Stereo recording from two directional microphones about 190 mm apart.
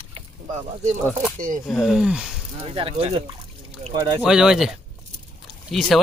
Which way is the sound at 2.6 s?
30° right (ahead or behind).